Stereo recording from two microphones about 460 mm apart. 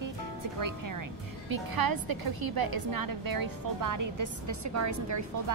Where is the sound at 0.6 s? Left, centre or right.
Right.